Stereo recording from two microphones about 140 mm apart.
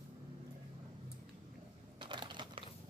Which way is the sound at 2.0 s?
35° right (ahead or behind).